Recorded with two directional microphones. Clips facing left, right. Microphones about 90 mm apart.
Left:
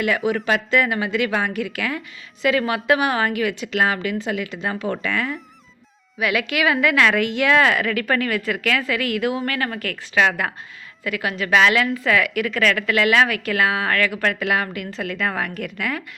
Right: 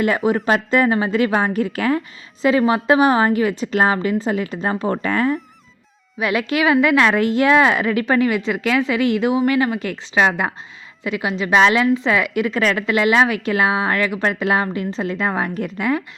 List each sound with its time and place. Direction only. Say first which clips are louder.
0.0 s a woman's voice: right 3 dB; 35° right (ahead or behind)
7.5 s a woman's voice: even; 25° right (ahead or behind)
9.4 s a woman's voice: right 7 dB; 10° right (ahead or behind)